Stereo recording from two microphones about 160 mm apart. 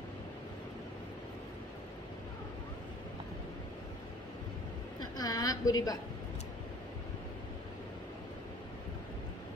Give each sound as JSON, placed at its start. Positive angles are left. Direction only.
{"t": 5.2, "sound": "a woman's voice", "side_deg": 25}